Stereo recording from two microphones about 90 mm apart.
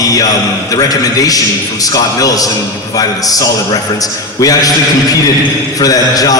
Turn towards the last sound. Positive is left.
turn(degrees=40)  # may be behind; listen again after turning